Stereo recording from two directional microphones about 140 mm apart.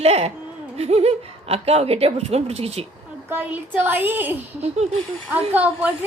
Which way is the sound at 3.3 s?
15° right (ahead or behind).